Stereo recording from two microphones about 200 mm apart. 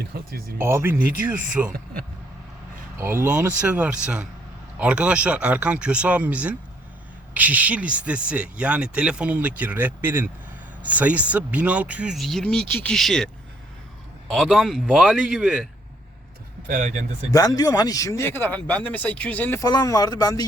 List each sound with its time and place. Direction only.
0.0 s speech: 50° right (ahead or behind)
0.6 s speech: 10° right (ahead or behind)
3.0 s speech: 10° right (ahead or behind)
16.6 s speech: 40° right (ahead or behind)
17.3 s speech: 20° left (ahead or behind)
19.6 s speech: 20° left (ahead or behind)